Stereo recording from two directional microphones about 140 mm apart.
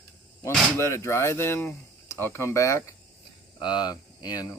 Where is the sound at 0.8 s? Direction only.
20° left (ahead or behind).